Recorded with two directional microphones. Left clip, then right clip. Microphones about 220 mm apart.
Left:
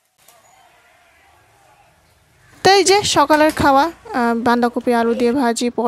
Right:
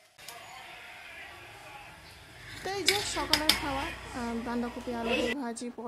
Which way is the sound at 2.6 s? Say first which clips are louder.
Left 18 dB; 40° left (ahead or behind).